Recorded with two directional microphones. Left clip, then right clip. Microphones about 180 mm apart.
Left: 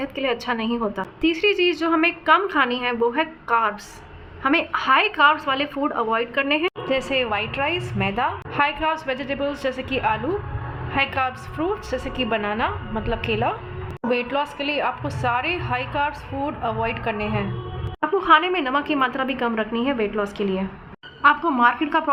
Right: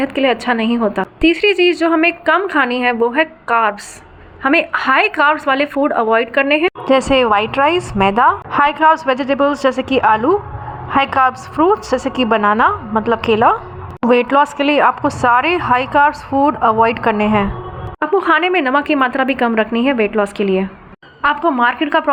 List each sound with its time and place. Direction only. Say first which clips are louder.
0.0 s a woman's voice: right 9 dB; 20° right (ahead or behind); by 17.4 s 45° right (ahead or behind)
18.2 s a woman's voice: right 3 dB; 25° right (ahead or behind)